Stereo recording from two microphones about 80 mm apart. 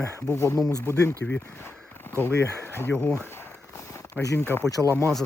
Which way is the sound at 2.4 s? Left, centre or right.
Right.